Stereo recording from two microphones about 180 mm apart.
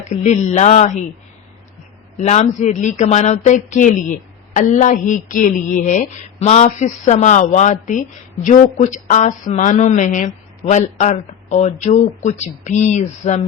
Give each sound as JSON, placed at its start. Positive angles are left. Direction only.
{"t": 0.0, "sound": "speech", "side_deg": 40}
{"t": 2.1, "sound": "speech", "side_deg": 40}